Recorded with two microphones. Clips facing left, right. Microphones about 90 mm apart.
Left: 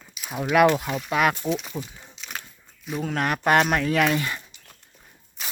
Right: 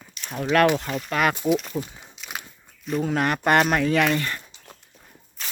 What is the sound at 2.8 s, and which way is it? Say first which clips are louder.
Speech: right 3 dB; centre (ahead or behind).